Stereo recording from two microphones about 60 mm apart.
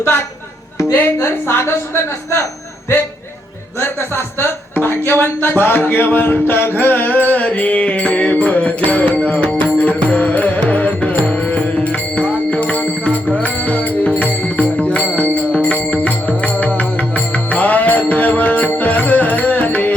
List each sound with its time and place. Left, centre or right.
0.9 s a woman's voice: left
3.8 s speech: left
13.3 s music: left